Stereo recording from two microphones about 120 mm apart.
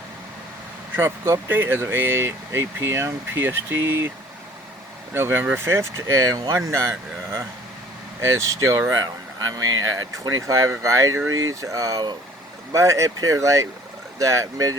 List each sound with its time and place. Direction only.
0.9 s speech: 20° right (ahead or behind)
5.1 s speech: 20° right (ahead or behind)
8.2 s speech: 25° right (ahead or behind)